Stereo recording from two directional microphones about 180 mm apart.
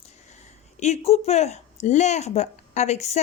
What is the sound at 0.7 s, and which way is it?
A woman's voice, 40° left (ahead or behind).